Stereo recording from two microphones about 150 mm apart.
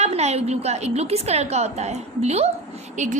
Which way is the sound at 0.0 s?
45° right (ahead or behind).